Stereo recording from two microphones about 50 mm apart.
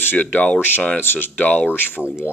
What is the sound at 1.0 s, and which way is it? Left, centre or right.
Speech, left.